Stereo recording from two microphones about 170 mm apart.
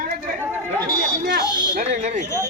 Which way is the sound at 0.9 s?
55° right (ahead or behind).